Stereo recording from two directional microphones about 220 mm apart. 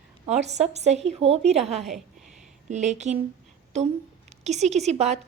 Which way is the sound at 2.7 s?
30° right (ahead or behind).